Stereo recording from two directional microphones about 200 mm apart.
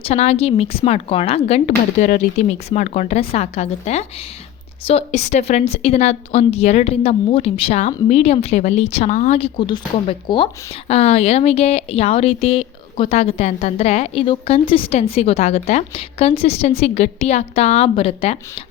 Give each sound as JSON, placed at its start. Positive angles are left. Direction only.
{"t": 0.0, "sound": "a woman's voice", "side_deg": 30}